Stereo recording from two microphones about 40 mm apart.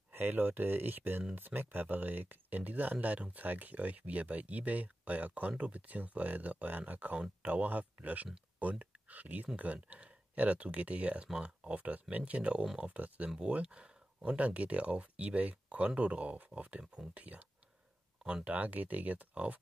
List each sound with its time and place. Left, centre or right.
0.1 s speech: right
18.2 s speech: right
18.5 s speech: right